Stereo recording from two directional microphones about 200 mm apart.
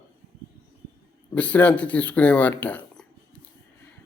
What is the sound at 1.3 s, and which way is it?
Speech, 5° left (ahead or behind).